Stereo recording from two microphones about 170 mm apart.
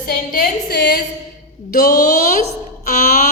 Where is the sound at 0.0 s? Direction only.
65° left (ahead or behind); by 1.0 s 80° left.